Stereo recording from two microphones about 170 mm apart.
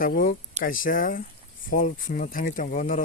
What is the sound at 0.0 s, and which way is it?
Speech, 55° left (ahead or behind).